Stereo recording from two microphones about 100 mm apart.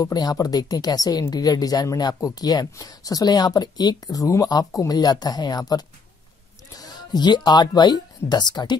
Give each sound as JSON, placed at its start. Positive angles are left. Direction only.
{"t": 0.0, "sound": "speech", "side_deg": 45}